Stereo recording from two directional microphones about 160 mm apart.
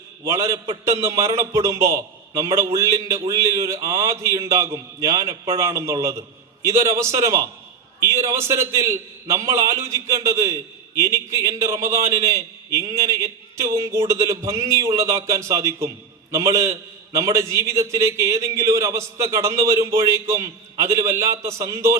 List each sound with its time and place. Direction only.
0.3 s a man's voice: 15° right (ahead or behind)